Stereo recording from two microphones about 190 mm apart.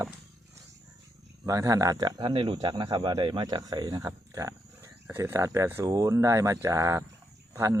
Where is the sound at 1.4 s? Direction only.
15° right (ahead or behind).